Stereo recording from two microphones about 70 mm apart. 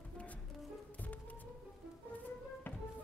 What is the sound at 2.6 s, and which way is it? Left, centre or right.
Music, left.